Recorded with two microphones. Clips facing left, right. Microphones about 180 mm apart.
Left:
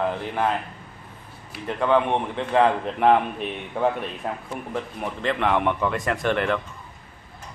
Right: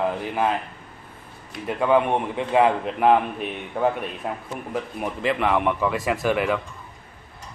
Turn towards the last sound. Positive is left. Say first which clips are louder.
# right 1 dB
turn(degrees=-5)  # may be behind; listen again after turning